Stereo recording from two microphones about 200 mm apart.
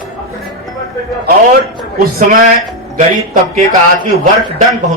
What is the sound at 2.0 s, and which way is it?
Speech, 50° right (ahead or behind).